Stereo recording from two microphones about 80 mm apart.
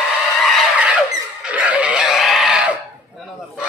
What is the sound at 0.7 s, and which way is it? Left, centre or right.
Vehicle, centre.